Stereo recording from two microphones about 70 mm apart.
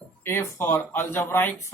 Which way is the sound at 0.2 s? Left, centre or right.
Left.